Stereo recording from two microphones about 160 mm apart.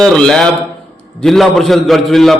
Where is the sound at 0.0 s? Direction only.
5° left (ahead or behind).